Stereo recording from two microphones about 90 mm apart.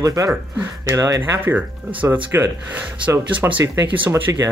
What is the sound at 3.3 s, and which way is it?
Speech, 15° right (ahead or behind).